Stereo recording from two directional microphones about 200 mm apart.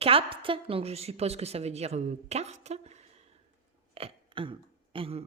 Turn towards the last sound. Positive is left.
turn(degrees=-30)  # may be behind; listen again after turning